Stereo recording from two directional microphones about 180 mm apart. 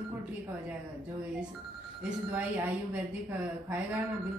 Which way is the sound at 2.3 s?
10° right (ahead or behind).